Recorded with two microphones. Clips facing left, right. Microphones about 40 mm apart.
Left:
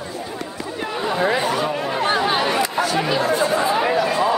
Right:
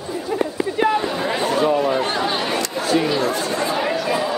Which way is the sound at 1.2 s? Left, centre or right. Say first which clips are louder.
Left 3 dB; centre.